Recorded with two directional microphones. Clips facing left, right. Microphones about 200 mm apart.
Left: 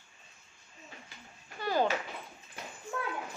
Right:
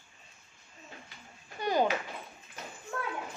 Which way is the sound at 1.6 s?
20° right (ahead or behind).